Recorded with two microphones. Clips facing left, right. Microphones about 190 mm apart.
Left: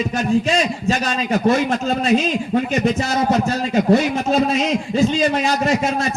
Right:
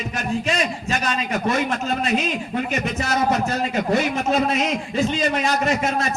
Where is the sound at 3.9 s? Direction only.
30° left (ahead or behind).